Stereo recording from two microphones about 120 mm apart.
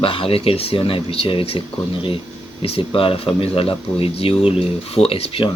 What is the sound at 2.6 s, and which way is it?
Speech, 50° left (ahead or behind).